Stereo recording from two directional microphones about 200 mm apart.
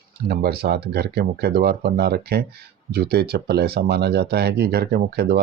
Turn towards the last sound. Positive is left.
turn(degrees=-50)  # may be behind; listen again after turning